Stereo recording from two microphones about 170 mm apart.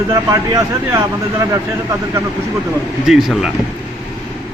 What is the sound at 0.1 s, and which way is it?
Speech, 20° right (ahead or behind).